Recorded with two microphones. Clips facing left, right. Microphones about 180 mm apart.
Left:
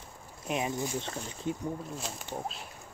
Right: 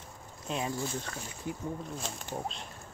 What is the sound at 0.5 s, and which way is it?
Speech, 20° left (ahead or behind).